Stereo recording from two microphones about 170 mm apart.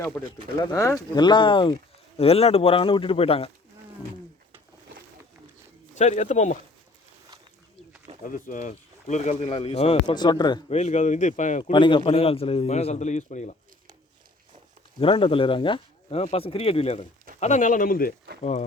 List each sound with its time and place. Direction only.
0.7 s speech: 15° left (ahead or behind); by 3.5 s 35° left (ahead or behind)
5.9 s speech: 45° left (ahead or behind)
8.2 s speech: 50° left (ahead or behind)
10.2 s speech: 25° left (ahead or behind)
10.7 s speech: 40° left (ahead or behind)
11.7 s speech: 25° left (ahead or behind); by 13.6 s 45° left (ahead or behind)
14.9 s speech: 30° left (ahead or behind); by 18.1 s 55° left (ahead or behind)